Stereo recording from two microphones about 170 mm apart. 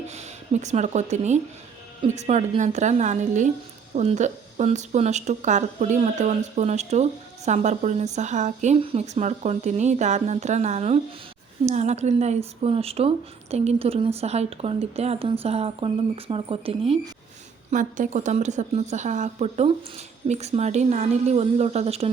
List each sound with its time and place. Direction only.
0.1 s speech: 40° right (ahead or behind)
17.7 s speech: 50° right (ahead or behind)